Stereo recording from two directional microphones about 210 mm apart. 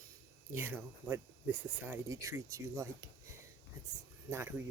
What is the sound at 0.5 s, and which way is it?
Speech, 10° right (ahead or behind).